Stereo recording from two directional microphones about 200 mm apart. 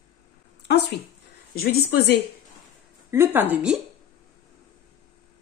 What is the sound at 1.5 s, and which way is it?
Speech, 50° left (ahead or behind).